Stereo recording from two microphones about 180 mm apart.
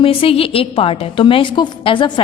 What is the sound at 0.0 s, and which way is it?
A woman's voice, 30° left (ahead or behind).